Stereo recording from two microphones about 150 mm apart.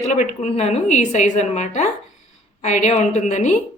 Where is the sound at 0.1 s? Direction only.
50° left (ahead or behind).